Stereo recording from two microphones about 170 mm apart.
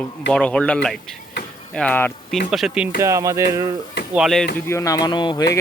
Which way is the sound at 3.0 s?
20° right (ahead or behind).